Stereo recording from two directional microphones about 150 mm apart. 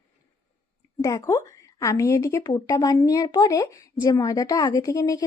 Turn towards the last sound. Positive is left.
turn(degrees=20)  # may be behind; listen again after turning